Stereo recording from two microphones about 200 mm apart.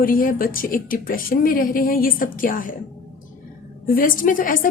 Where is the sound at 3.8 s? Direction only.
45° left (ahead or behind).